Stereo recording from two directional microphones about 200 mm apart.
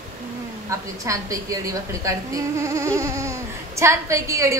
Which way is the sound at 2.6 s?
15° right (ahead or behind).